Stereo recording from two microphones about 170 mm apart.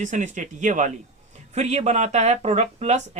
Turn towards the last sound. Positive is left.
turn(degrees=-40)  # may be behind; listen again after turning